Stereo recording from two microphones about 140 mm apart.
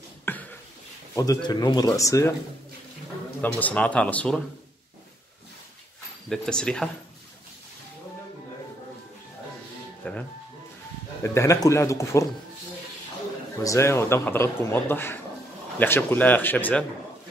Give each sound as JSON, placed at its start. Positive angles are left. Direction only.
{"t": 0.2, "sound": "a sound", "side_deg": 15}
{"t": 1.1, "sound": "speech", "side_deg": 25}
{"t": 3.3, "sound": "a man's voice", "side_deg": 10}
{"t": 6.2, "sound": "speech", "side_deg": 5}
{"t": 10.0, "sound": "a man's voice", "side_deg": 10}
{"t": 11.2, "sound": "speech", "side_deg": 20}
{"t": 13.6, "sound": "a man's voice", "side_deg": 20}